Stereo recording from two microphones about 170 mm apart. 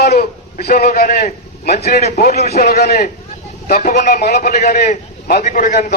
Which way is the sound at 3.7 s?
50° left (ahead or behind).